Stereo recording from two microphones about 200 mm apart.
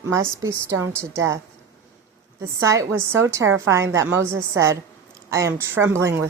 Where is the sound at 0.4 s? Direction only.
15° right (ahead or behind).